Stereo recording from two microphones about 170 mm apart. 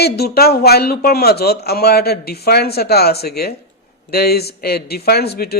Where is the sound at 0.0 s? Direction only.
70° left (ahead or behind).